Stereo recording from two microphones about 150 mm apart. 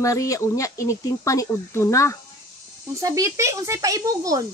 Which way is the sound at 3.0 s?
20° right (ahead or behind).